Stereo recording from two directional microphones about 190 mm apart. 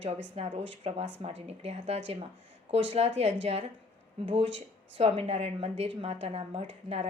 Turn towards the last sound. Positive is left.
turn(degrees=-35)  # may be behind; listen again after turning